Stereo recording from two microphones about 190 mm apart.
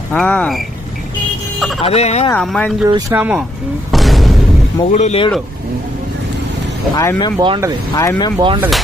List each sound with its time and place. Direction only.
0.1 s speech: 5° left (ahead or behind)
1.8 s fowl: 35° left (ahead or behind)
2.3 s speech: 5° left (ahead or behind)
2.8 s speech: 15° right (ahead or behind)
3.2 s speech: 5° right (ahead or behind)
3.9 s boom: centre (ahead or behind)
4.9 s fowl: 35° left (ahead or behind)
6.9 s speech: 15° left (ahead or behind)
7.3 s speech: 25° right (ahead or behind)
7.9 s speech: 15° left (ahead or behind)
8.4 s speech: 25° right (ahead or behind)